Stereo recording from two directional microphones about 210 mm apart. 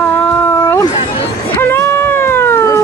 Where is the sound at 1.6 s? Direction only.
10° left (ahead or behind).